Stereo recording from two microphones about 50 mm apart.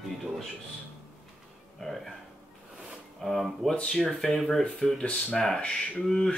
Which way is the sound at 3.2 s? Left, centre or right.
Centre.